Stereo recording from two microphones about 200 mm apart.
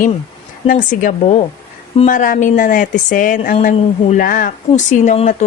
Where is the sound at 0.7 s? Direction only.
40° left (ahead or behind).